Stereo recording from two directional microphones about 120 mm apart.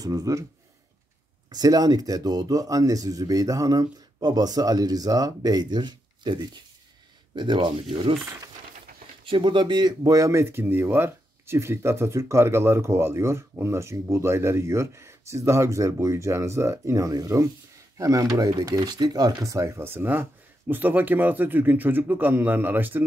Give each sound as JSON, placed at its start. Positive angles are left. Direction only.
{"t": 0.0, "sound": "speech", "side_deg": -30}
{"t": 1.5, "sound": "speech", "side_deg": -35}
{"t": 9.2, "sound": "speech", "side_deg": -45}